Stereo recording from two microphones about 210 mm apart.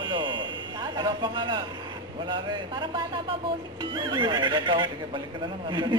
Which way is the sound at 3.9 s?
20° right (ahead or behind).